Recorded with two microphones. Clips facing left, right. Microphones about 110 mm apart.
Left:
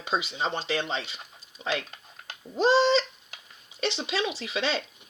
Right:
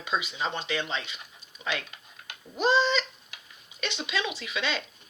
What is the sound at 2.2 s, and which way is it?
Cat, 35° left (ahead or behind).